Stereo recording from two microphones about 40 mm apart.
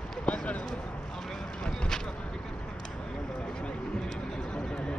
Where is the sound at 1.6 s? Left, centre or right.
Left.